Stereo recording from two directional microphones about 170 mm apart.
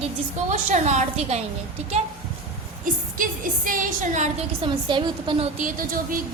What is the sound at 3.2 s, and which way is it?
A woman's voice, 50° right (ahead or behind).